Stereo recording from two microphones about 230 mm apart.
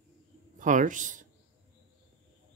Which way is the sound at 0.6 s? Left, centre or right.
Right.